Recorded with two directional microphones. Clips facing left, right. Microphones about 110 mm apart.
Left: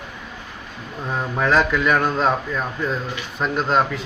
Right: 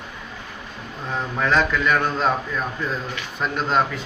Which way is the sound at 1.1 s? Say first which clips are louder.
Left 2 dB; 5° left (ahead or behind).